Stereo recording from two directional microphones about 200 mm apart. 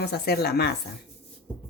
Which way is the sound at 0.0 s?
55° left (ahead or behind).